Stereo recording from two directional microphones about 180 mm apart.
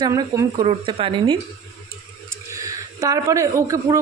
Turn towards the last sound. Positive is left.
turn(degrees=-20)  # may be behind; listen again after turning